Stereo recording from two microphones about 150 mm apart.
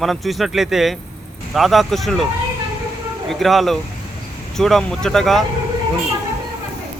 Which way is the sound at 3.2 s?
Centre (ahead or behind).